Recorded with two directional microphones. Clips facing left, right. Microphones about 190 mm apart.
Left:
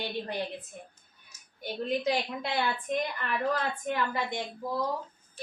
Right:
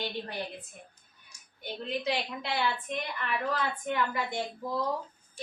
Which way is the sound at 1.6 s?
45° left (ahead or behind).